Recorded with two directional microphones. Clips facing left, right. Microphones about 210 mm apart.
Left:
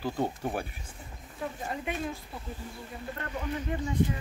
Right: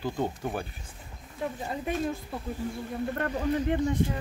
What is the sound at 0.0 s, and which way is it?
Speech, 10° left (ahead or behind).